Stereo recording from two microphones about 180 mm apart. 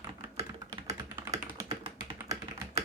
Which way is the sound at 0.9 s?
20° right (ahead or behind).